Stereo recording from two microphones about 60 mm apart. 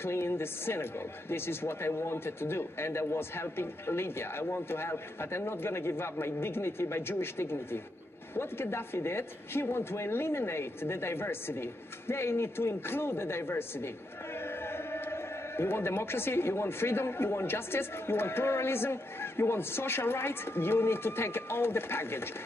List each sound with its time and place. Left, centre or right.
0.0 s a man's voice: left